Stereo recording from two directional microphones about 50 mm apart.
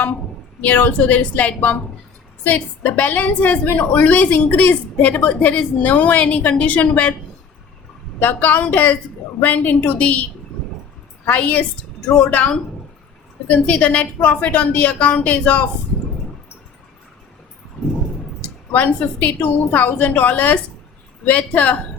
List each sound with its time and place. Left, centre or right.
0.6 s a woman's voice: left
8.2 s a woman's voice: left
11.3 s a woman's voice: left
12.0 s a woman's voice: centre
17.8 s a sound: centre
18.4 s a woman's voice: left